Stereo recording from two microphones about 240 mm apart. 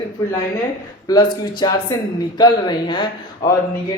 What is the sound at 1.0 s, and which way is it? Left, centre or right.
Speech, centre.